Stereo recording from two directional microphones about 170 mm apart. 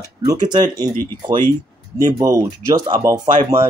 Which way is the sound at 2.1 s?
20° right (ahead or behind).